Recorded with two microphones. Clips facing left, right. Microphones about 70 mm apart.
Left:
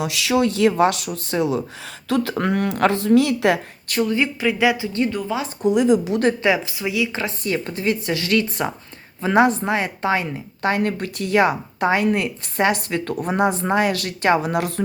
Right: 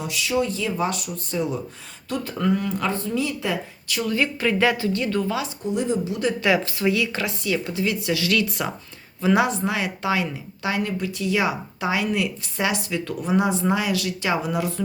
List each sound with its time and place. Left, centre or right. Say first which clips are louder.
0.0 s speech: left 4 dB; left
2.3 s speech: left 2 dB; left
4.0 s speech: left 3 dB; left
4.4 s speech: left 1 dB; centre
4.9 s speech: left 1 dB; left
5.6 s speech: left 9 dB; left
6.7 s speech: right 1 dB; centre
7.3 s speech: left 1 dB; left